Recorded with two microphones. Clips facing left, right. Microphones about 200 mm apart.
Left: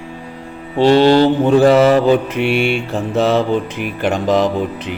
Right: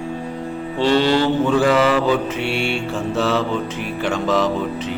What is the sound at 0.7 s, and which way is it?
Mantra, 50° left (ahead or behind).